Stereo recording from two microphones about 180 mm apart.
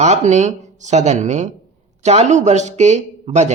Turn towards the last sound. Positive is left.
turn(degrees=-40)  # may be behind; listen again after turning